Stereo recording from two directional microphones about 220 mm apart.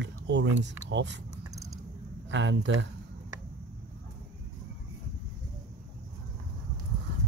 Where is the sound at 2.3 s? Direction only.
55° right (ahead or behind).